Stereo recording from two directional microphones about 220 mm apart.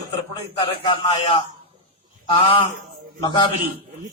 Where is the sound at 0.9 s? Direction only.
20° left (ahead or behind).